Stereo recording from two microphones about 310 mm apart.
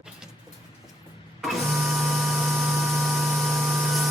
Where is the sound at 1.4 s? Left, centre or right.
Centre.